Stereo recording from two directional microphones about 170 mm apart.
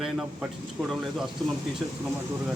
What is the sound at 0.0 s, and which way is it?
A man's voice, 5° right (ahead or behind).